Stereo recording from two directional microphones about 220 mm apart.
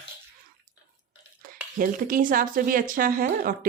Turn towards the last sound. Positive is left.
turn(degrees=-40)  # may be behind; listen again after turning